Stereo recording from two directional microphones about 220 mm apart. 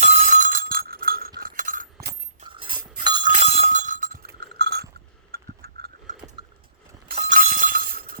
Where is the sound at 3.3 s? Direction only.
30° right (ahead or behind); by 4.8 s 50° right (ahead or behind).